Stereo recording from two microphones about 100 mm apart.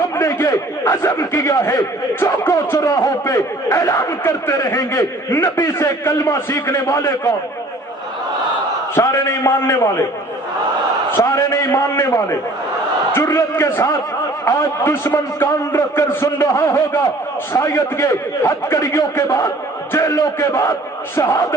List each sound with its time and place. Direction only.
0.2 s a sound: 30° left (ahead or behind)
2.2 s speech: 30° left (ahead or behind)
9.0 s a man's voice: 30° left (ahead or behind)
11.2 s a man's voice: 35° left (ahead or behind)